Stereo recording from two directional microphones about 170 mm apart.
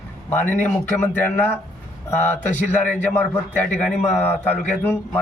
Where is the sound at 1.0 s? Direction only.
10° left (ahead or behind).